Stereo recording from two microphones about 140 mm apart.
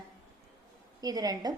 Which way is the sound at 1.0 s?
25° right (ahead or behind).